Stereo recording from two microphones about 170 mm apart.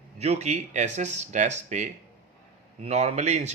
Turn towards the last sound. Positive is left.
turn(degrees=-45)  # may be behind; listen again after turning